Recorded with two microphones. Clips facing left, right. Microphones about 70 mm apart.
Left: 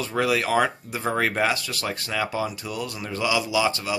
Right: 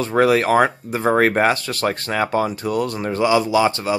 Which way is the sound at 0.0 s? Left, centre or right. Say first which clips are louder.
Right 8 dB; right.